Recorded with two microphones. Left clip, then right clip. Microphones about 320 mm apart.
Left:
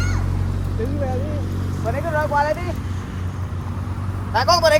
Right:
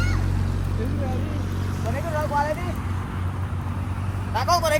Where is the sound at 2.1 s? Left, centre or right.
Centre.